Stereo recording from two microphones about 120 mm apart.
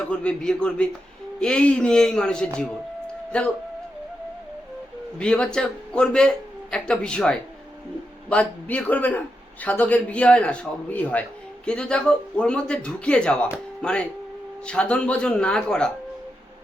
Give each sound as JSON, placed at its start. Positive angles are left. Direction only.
{"t": 0.1, "sound": "a man's voice", "side_deg": 10}
{"t": 5.1, "sound": "a man's voice", "side_deg": 10}